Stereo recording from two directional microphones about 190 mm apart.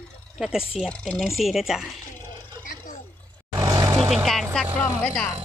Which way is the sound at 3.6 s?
20° right (ahead or behind).